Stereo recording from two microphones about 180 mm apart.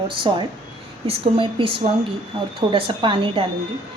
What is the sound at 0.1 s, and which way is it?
A woman's voice, 25° right (ahead or behind).